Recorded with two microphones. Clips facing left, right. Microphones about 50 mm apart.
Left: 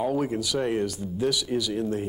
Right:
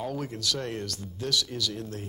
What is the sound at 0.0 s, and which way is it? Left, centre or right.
Speech, centre.